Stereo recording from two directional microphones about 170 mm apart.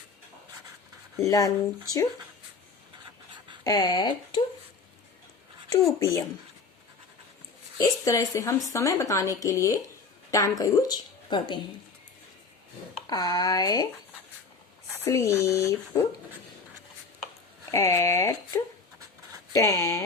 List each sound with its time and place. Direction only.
1.2 s a woman's voice: 20° left (ahead or behind)
3.6 s a woman's voice: 25° left (ahead or behind)
5.7 s a woman's voice: 20° left (ahead or behind)
7.8 s a woman's voice: 20° left (ahead or behind)
13.1 s a woman's voice: 25° left (ahead or behind)
15.0 s speech: 15° left (ahead or behind)
17.7 s a woman's voice: 20° left (ahead or behind)